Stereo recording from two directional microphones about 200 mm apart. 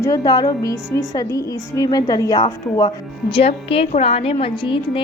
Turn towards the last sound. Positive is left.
turn(degrees=25)  # may be behind; listen again after turning